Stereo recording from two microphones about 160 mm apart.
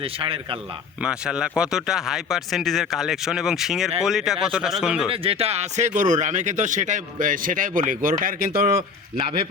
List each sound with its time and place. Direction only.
0.0 s speech: 35° right (ahead or behind)
1.0 s speech: 5° right (ahead or behind)
5.1 s speech: 35° right (ahead or behind); by 8.7 s 65° right (ahead or behind)
9.1 s speech: 35° right (ahead or behind)